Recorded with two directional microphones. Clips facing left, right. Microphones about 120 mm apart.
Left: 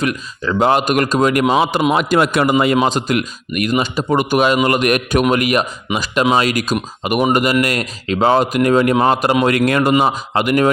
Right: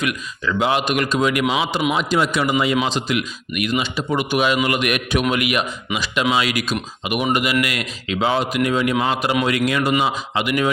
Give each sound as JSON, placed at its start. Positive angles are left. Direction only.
{"t": 0.0, "sound": "speech", "side_deg": 35}